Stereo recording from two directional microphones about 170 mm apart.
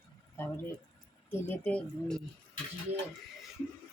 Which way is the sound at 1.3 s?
10° left (ahead or behind).